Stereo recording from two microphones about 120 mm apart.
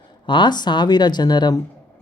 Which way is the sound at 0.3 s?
40° left (ahead or behind).